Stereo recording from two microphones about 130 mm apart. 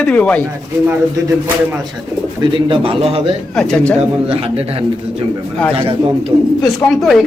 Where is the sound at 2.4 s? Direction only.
40° right (ahead or behind).